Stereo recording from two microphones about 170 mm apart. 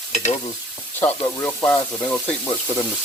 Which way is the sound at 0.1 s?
45° left (ahead or behind).